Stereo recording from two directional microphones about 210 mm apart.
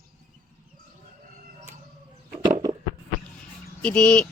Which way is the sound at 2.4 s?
20° right (ahead or behind).